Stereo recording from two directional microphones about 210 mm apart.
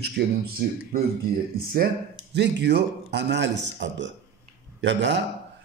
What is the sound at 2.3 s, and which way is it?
A man's voice, 55° right (ahead or behind).